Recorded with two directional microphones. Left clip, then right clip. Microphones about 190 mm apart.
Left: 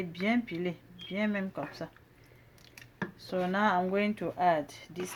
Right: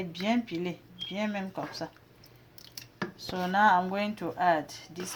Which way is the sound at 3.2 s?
25° left (ahead or behind).